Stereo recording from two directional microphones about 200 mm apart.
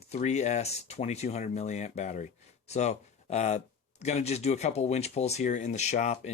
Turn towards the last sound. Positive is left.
turn(degrees=35)  # may be behind; listen again after turning